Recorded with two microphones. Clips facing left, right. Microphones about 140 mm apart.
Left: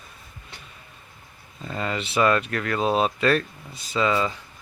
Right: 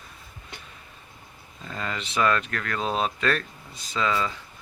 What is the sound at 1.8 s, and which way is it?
Speech, 10° left (ahead or behind).